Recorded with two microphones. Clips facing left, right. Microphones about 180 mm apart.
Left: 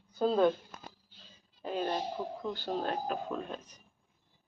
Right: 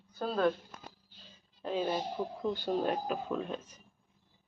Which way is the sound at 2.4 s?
15° right (ahead or behind).